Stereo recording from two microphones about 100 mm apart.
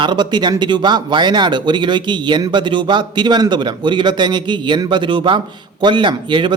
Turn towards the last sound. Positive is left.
turn(degrees=-50)  # may be behind; listen again after turning